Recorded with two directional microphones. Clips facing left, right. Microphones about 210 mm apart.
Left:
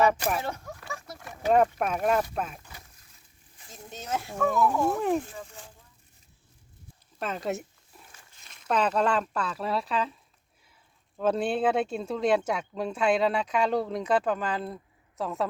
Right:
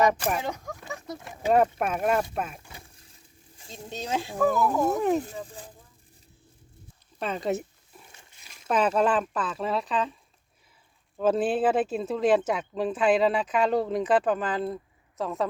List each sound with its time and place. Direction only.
0.1 s speech: 5° right (ahead or behind)
0.4 s speech: 15° right (ahead or behind)
1.5 s speech: 5° right (ahead or behind)
3.6 s speech: 25° right (ahead or behind)
4.4 s speech: centre (ahead or behind)
5.2 s speech: 35° right (ahead or behind)
7.2 s speech: centre (ahead or behind)
8.7 s speech: 5° right (ahead or behind)
11.2 s speech: 5° right (ahead or behind)